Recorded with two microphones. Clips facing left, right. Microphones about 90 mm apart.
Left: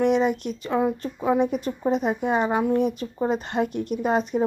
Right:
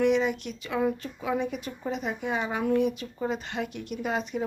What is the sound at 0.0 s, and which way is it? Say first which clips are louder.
A woman's voice: left 3 dB; 40° left (ahead or behind).